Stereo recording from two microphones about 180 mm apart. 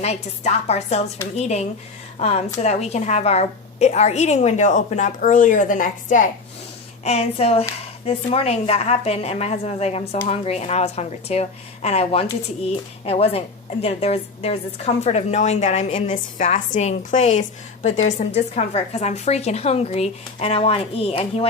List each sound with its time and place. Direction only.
0.0 s a woman's voice: 35° left (ahead or behind)